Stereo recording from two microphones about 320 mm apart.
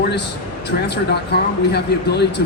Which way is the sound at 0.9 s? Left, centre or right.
Left.